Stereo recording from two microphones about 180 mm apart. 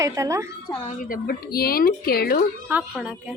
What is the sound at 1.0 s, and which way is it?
Speech, 55° left (ahead or behind).